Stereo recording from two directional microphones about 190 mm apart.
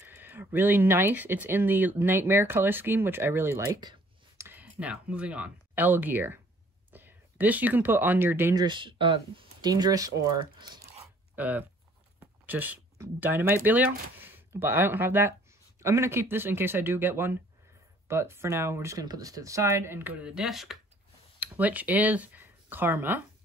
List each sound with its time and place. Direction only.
0.0 s speech: 10° right (ahead or behind)
8.6 s speech: 25° right (ahead or behind)
11.0 s a sound: 10° right (ahead or behind)
12.2 s speech: 10° right (ahead or behind)